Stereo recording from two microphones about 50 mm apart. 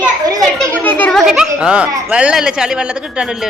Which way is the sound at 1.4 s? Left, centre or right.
Centre.